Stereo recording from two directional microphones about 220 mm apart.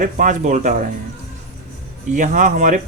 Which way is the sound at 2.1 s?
35° right (ahead or behind).